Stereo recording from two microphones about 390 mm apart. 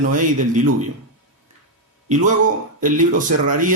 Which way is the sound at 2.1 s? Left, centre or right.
Centre.